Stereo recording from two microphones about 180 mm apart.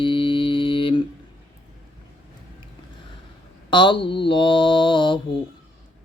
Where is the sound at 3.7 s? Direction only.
25° left (ahead or behind).